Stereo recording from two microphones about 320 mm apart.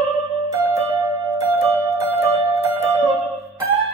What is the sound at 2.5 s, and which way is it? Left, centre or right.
Music, centre.